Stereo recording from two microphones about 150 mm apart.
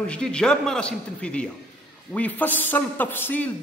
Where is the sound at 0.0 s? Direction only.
5° left (ahead or behind).